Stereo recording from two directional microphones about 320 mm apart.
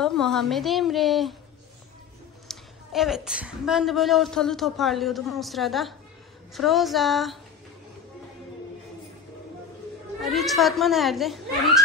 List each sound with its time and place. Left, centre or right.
0.0 s a woman's voice: centre
2.4 s a woman's voice: centre
10.2 s a woman's voice: centre